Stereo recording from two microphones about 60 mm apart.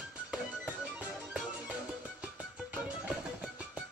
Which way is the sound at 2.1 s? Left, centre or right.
Centre.